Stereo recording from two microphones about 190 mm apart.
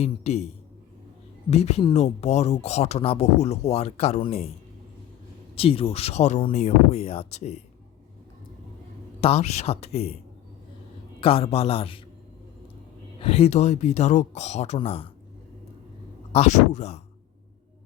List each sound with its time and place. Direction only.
0.0 s speech: 35° left (ahead or behind)
1.5 s speech: 35° left (ahead or behind)
5.5 s speech: 30° left (ahead or behind)
9.2 s speech: 35° left (ahead or behind)
11.2 s a man's voice: 30° left (ahead or behind)
13.2 s speech: 30° left (ahead or behind)
16.3 s speech: 35° left (ahead or behind)